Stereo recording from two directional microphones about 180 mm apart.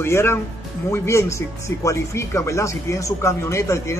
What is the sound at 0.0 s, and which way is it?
Speech, 15° left (ahead or behind).